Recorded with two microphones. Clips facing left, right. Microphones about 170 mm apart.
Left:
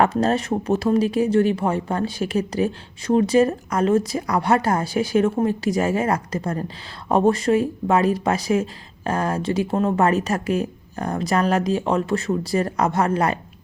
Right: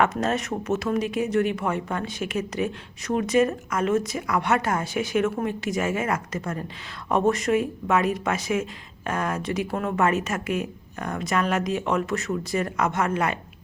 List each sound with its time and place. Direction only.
0.0 s speech: 35° left (ahead or behind)